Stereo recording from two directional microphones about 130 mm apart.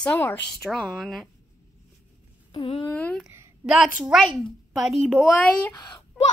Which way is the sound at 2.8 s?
10° left (ahead or behind).